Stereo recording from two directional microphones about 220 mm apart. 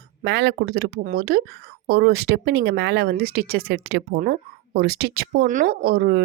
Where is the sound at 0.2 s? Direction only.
50° right (ahead or behind).